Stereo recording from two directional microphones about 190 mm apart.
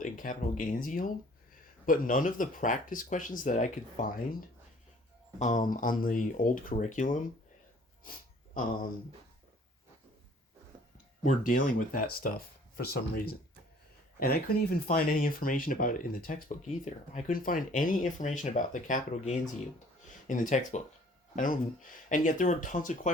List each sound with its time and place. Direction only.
0.0 s speech: 45° left (ahead or behind)
5.4 s speech: 40° left (ahead or behind)
11.2 s speech: 45° left (ahead or behind)
14.2 s speech: 50° left (ahead or behind)